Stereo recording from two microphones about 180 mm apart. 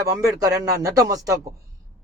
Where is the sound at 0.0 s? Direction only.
20° right (ahead or behind).